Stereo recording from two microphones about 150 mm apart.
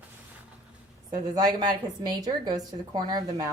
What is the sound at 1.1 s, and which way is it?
A woman's voice, 25° right (ahead or behind).